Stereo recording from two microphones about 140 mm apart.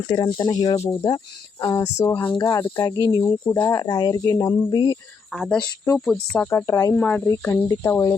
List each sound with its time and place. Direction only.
0.1 s speech: 30° left (ahead or behind)
2.4 s speech: 20° left (ahead or behind)
5.3 s speech: 5° left (ahead or behind)
6.5 s speech: 20° left (ahead or behind)
6.9 s speech: 10° left (ahead or behind)